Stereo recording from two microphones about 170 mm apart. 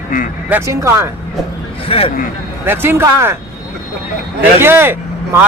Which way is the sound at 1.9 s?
35° left (ahead or behind).